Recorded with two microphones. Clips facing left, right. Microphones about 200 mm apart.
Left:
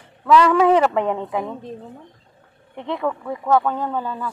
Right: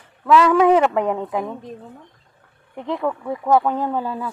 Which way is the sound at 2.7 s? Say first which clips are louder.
Right 1 dB; 5° right (ahead or behind).